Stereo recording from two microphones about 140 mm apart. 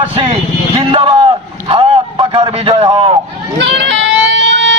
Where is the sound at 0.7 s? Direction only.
40° right (ahead or behind).